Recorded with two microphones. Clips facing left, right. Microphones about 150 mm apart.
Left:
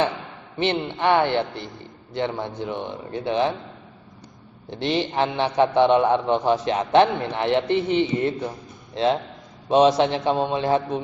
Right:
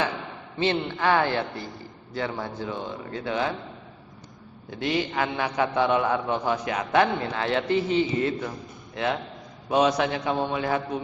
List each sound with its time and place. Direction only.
0.6 s a man's voice: 25° left (ahead or behind)
4.7 s a man's voice: 25° left (ahead or behind)